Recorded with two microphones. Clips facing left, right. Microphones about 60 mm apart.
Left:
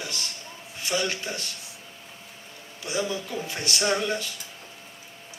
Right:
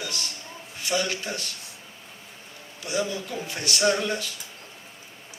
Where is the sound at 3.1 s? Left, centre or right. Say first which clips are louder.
Left 1 dB; left.